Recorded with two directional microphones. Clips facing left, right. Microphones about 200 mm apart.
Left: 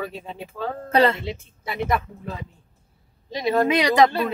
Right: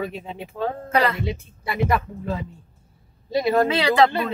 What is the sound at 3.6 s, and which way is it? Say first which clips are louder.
Speech: left 1 dB; 15° left (ahead or behind).